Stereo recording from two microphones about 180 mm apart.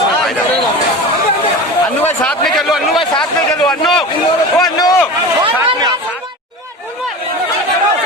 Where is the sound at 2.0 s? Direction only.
10° left (ahead or behind).